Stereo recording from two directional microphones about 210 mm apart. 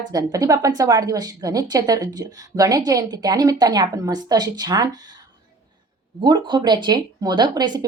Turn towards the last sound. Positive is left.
turn(degrees=-20)  # may be behind; listen again after turning